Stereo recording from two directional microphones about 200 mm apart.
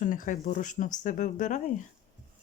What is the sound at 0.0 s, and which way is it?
Speech, 40° left (ahead or behind).